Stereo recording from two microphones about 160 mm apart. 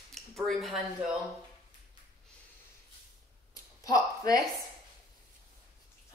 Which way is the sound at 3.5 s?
20° left (ahead or behind).